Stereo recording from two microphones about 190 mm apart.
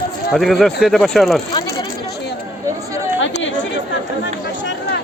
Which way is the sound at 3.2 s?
80° left.